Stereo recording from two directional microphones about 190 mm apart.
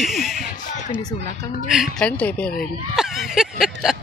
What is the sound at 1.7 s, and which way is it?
Speech, centre (ahead or behind).